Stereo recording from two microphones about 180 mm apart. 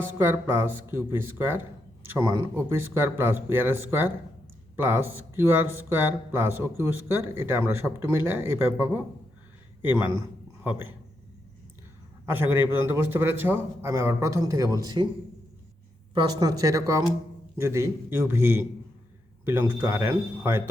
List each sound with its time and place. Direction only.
0.0 s a man's voice: 10° right (ahead or behind)
12.2 s speech: 10° right (ahead or behind)
16.1 s speech: 20° right (ahead or behind)